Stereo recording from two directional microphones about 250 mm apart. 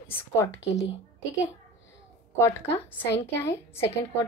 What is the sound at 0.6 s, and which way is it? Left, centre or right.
Speech, left.